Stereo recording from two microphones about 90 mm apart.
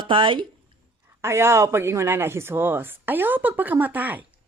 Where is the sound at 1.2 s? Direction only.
30° right (ahead or behind).